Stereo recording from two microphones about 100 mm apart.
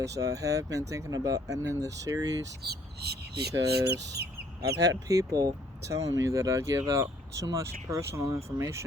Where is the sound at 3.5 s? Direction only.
35° right (ahead or behind).